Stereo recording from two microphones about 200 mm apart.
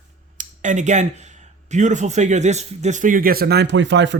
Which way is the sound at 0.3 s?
40° right (ahead or behind).